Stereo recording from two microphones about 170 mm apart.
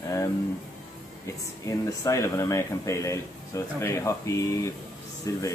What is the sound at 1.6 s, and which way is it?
Speech, 20° left (ahead or behind).